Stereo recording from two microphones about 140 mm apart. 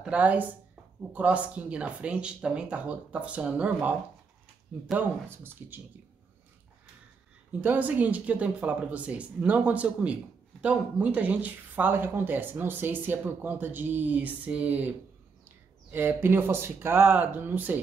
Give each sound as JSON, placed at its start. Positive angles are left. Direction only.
{"t": 0.0, "sound": "speech", "side_deg": -10}
{"t": 4.9, "sound": "speech", "side_deg": -15}
{"t": 7.6, "sound": "speech", "side_deg": -10}